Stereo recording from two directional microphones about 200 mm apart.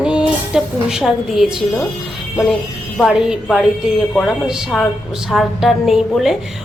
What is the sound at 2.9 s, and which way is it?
A woman's voice, centre (ahead or behind).